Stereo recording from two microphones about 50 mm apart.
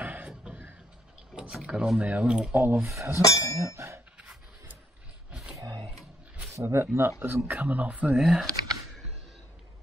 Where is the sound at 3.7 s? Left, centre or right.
Right.